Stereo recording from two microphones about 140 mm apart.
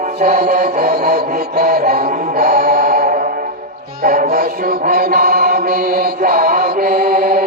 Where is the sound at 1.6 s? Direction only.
90° right.